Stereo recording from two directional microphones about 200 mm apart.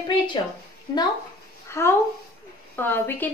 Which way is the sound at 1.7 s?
15° left (ahead or behind).